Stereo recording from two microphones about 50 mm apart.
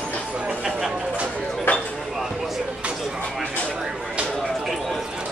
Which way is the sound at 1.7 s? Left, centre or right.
Left.